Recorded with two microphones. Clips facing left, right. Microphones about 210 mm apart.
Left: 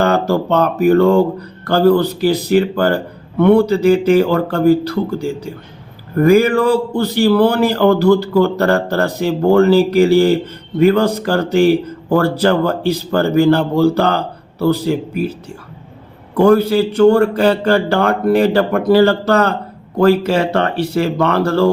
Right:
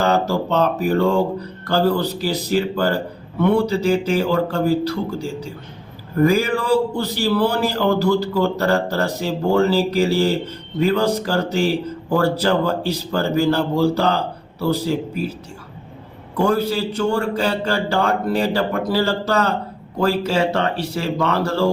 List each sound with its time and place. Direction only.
0.0 s speech: 60° left (ahead or behind)
16.4 s speech: 60° left (ahead or behind)